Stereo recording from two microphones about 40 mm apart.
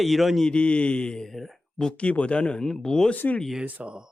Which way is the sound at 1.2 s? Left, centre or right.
Centre.